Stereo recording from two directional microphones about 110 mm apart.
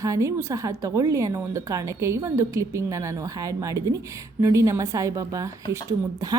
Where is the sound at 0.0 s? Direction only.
30° right (ahead or behind).